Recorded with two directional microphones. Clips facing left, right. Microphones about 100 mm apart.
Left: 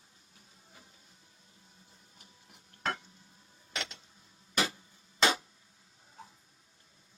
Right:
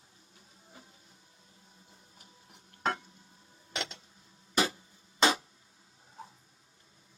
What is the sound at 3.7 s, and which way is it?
Vehicle, 25° right (ahead or behind).